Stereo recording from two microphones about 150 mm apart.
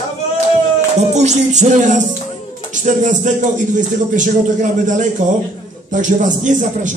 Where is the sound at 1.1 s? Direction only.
50° right (ahead or behind).